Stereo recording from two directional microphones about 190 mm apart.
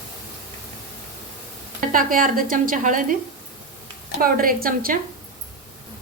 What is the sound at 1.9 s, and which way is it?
A woman's voice, 45° right (ahead or behind).